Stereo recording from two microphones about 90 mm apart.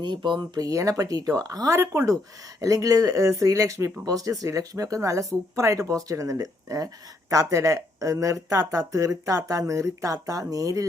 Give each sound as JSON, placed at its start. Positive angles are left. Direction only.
{"t": 0.0, "sound": "speech", "side_deg": -60}